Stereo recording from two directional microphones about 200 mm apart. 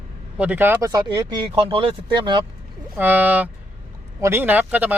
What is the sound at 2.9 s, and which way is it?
Speech, 10° right (ahead or behind).